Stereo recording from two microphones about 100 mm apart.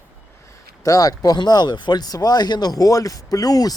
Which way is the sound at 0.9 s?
40° left (ahead or behind).